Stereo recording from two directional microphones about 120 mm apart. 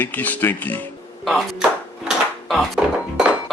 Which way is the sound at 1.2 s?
Centre (ahead or behind).